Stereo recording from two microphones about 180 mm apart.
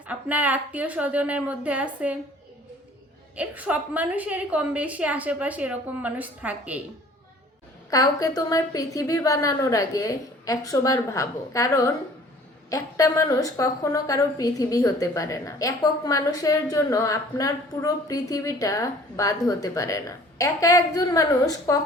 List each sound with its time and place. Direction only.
0.1 s a woman's voice: 10° right (ahead or behind)
3.3 s a woman's voice: 10° right (ahead or behind)
7.9 s a woman's voice: 20° left (ahead or behind)